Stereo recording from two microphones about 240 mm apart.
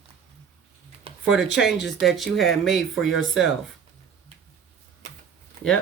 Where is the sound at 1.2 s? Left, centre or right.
Centre.